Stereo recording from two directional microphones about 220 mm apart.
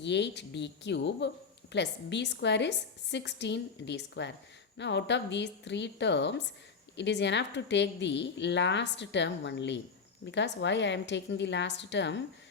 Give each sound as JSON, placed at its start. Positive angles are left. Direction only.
{"t": 0.0, "sound": "a woman's voice", "side_deg": 50}